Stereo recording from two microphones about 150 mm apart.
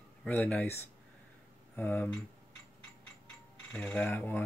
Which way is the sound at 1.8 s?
10° left (ahead or behind).